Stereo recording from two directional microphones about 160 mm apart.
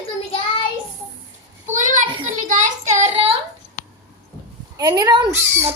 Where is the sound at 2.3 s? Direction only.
55° right (ahead or behind).